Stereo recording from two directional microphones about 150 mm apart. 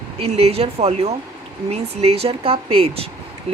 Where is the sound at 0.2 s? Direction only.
40° right (ahead or behind).